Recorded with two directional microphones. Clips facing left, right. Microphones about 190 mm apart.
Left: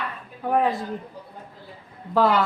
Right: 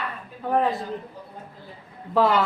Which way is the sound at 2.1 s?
Centre (ahead or behind).